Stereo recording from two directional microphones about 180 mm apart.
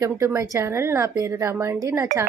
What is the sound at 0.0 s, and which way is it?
Speech, 15° right (ahead or behind).